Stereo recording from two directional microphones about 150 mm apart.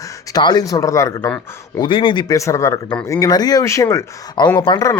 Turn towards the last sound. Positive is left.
turn(degrees=25)  # may be behind; listen again after turning